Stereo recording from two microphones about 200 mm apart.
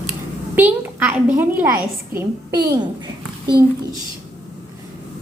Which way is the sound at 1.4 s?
10° right (ahead or behind).